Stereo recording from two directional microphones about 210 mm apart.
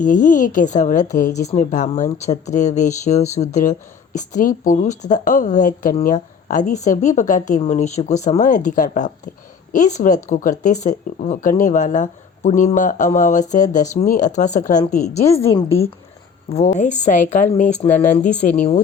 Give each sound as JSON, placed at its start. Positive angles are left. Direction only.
{"t": 0.0, "sound": "speech", "side_deg": 35}
{"t": 16.5, "sound": "speech", "side_deg": 35}
{"t": 17.7, "sound": "speech", "side_deg": 5}
{"t": 17.9, "sound": "speech", "side_deg": 35}